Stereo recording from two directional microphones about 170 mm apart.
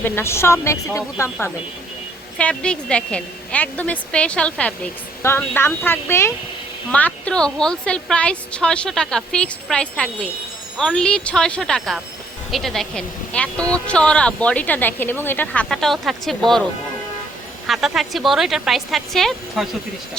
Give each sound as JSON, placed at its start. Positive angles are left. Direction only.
{"t": 0.0, "sound": "a woman's voice", "side_deg": 15}
{"t": 17.7, "sound": "a woman's voice", "side_deg": 0}